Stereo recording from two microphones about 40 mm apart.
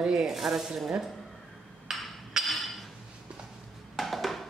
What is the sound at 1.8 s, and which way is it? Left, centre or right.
Hammer, centre.